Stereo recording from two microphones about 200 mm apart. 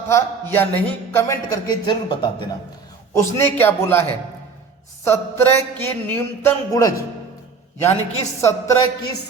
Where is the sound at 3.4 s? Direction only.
10° left (ahead or behind).